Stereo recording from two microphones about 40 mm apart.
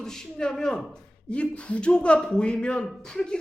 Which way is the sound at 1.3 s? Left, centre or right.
Left.